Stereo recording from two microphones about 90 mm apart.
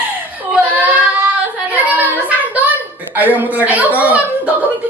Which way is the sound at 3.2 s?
20° right (ahead or behind).